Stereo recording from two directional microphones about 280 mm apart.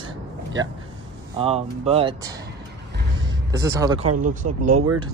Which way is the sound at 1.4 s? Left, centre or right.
Right.